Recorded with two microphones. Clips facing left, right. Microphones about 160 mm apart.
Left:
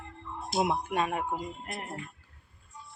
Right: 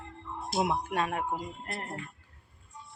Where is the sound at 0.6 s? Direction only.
10° left (ahead or behind).